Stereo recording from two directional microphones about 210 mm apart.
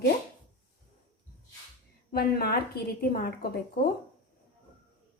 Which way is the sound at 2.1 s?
45° left (ahead or behind).